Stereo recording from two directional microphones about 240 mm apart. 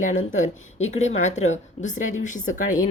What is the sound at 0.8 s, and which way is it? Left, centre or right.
A woman's voice, left.